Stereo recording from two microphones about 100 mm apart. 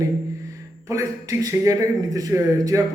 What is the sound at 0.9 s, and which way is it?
A man's voice, 30° right (ahead or behind).